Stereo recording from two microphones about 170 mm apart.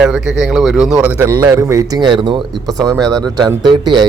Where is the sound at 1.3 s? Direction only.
20° right (ahead or behind).